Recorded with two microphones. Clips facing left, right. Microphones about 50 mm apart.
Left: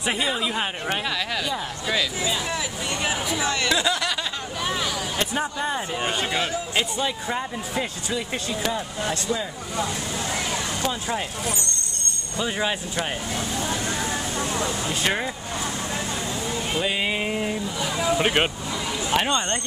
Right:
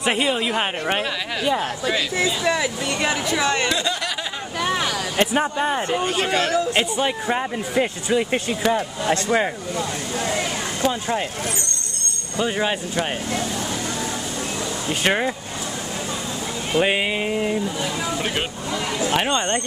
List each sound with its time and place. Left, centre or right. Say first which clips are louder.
0.1 s speech: right 3 dB; right
2.1 s speech: right 6 dB; right
4.6 s vehicle: right 5 dB; right
5.3 s speech: right 5 dB; right
6.3 s speech: right 6 dB; right
6.7 s speech: right 4 dB; right
8.7 s speech: right 6 dB; right
10.9 s speech: right 6 dB; centre
12.4 s speech: right 2 dB; centre
14.9 s speech: right 8 dB; centre
16.7 s speech: right 8 dB; right
17.0 s speech: right 3 dB; centre
18.0 s speech: left 7 dB; left
19.1 s speech: right 1 dB; centre